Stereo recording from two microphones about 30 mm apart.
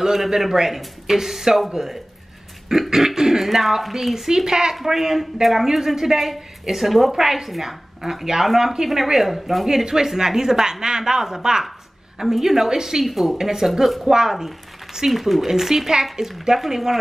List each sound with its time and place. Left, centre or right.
0.0 s a woman's voice: centre
2.7 s a woman's voice: centre
4.5 s a woman's voice: right; by 9.7 s centre
9.7 s a woman's voice: centre
13.0 s a woman's voice: centre
15.0 s a woman's voice: centre